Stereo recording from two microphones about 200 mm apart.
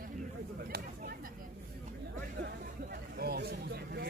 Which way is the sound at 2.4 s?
55° right (ahead or behind).